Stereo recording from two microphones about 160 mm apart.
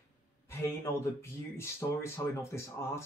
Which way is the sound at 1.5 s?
15° left (ahead or behind).